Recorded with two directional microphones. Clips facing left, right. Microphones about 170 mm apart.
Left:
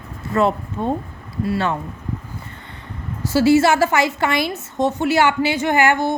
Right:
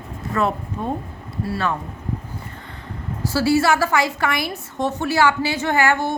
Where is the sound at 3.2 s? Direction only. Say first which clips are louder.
Left 4 dB; 20° left (ahead or behind).